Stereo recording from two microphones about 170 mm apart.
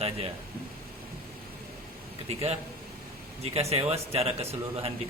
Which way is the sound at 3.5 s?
35° right (ahead or behind).